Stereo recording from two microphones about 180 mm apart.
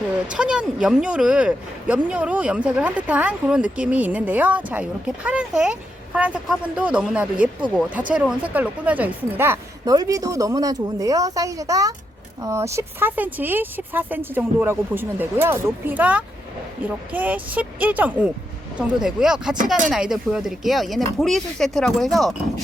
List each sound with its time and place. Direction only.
0.3 s speech: 5° right (ahead or behind)